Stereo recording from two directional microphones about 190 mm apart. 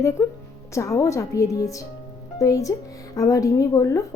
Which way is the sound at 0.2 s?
15° left (ahead or behind).